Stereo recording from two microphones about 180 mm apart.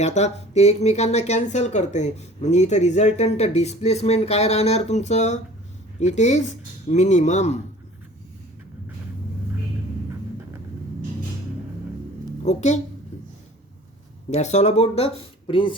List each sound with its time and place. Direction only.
0.0 s speech: 40° left (ahead or behind)
12.5 s speech: 40° left (ahead or behind)
14.3 s speech: 40° left (ahead or behind)